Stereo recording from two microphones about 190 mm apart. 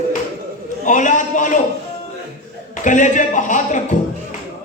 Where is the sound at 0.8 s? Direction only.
40° left (ahead or behind).